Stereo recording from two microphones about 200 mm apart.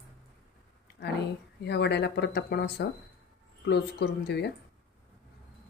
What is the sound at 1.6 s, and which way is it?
Speech, 55° left (ahead or behind).